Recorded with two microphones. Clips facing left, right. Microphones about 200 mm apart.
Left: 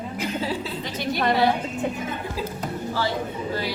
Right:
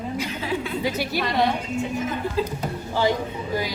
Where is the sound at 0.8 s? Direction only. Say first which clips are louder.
Right 2 dB; 5° right (ahead or behind).